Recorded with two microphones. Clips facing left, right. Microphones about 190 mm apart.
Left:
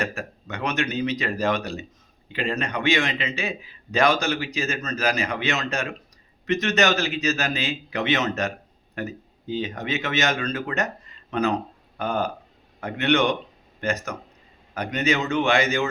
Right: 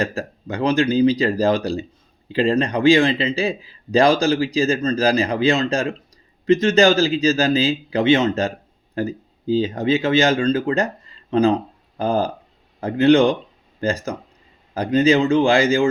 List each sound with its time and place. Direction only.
0.0 s a man's voice: 35° right (ahead or behind)